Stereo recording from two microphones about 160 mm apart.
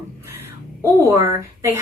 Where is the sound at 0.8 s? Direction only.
20° right (ahead or behind).